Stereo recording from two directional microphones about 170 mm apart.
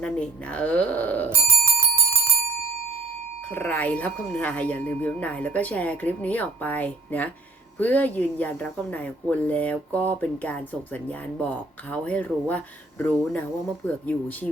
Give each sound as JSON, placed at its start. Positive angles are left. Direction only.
{"t": 0.0, "sound": "speech", "side_deg": 5}
{"t": 1.3, "sound": "bicycle bell", "side_deg": -15}
{"t": 3.5, "sound": "speech", "side_deg": 10}
{"t": 13.8, "sound": "speech", "side_deg": 10}